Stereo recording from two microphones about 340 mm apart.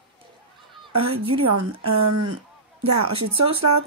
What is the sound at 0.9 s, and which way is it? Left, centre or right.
Speech, right.